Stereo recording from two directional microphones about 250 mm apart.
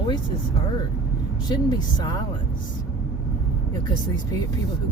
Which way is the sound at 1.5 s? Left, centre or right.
Centre.